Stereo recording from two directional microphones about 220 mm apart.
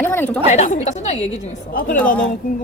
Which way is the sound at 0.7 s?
30° left (ahead or behind).